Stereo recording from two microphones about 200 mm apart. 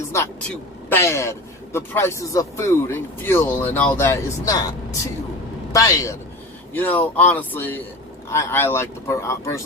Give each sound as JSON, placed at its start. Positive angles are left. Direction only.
{"t": 0.9, "sound": "a man's voice", "side_deg": 10}
{"t": 5.7, "sound": "a man's voice", "side_deg": 15}